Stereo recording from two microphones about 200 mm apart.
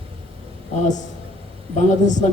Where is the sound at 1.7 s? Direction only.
35° left (ahead or behind).